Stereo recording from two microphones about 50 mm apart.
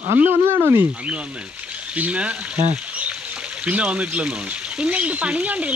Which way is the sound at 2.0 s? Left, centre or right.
Right.